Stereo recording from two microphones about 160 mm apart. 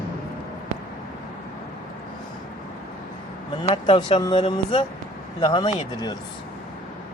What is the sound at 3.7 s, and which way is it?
Speech, 30° left (ahead or behind).